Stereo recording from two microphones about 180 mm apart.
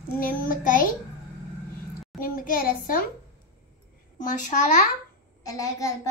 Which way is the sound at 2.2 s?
50° left (ahead or behind).